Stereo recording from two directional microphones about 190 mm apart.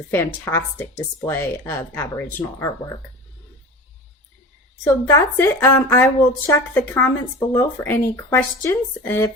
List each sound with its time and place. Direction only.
0.1 s a woman's voice: 10° left (ahead or behind)
4.8 s a woman's voice: 15° left (ahead or behind)